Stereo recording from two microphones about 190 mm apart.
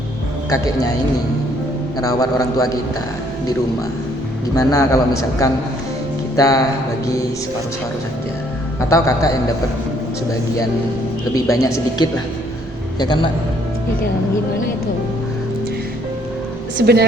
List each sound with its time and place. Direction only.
0.5 s a man's voice: 20° left (ahead or behind)
2.0 s a man's voice: 20° left (ahead or behind)
4.5 s a man's voice: 20° left (ahead or behind)
8.9 s a man's voice: 15° left (ahead or behind)
11.3 s a man's voice: 20° left (ahead or behind)
16.7 s speech: 60° right (ahead or behind)